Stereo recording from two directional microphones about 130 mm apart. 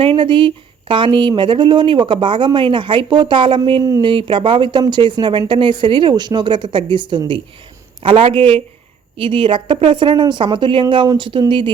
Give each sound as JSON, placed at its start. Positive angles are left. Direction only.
{"t": 0.0, "sound": "a man's voice", "side_deg": -45}